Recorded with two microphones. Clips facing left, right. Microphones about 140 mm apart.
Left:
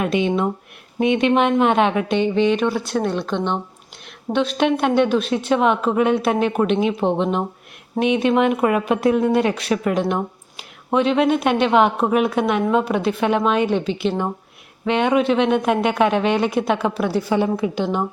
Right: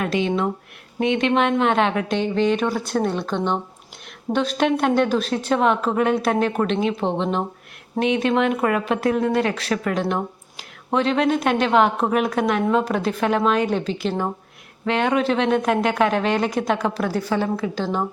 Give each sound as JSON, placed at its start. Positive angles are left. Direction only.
{"t": 0.0, "sound": "a woman's voice", "side_deg": 15}